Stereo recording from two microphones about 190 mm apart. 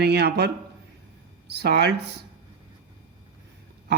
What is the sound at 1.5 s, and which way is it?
Speech, 60° right (ahead or behind).